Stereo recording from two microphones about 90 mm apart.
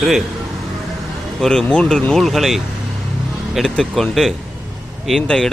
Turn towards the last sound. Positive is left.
turn(degrees=10)  # may be behind; listen again after turning